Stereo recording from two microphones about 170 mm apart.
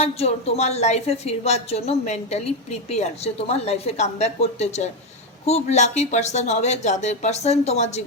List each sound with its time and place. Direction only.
0.0 s speech: 35° left (ahead or behind)
3.5 s speech: 40° left (ahead or behind)